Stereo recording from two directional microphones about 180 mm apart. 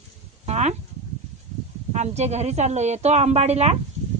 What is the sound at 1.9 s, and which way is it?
A woman's voice, 40° right (ahead or behind).